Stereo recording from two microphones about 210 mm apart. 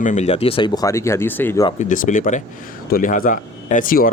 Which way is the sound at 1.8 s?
35° left (ahead or behind).